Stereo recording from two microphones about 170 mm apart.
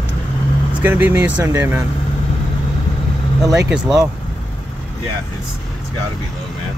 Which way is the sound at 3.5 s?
5° right (ahead or behind).